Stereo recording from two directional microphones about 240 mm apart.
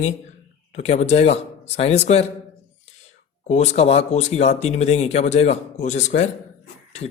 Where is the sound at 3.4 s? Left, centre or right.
Left.